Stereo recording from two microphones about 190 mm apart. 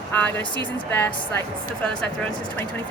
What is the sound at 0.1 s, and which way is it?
Speech, 10° left (ahead or behind).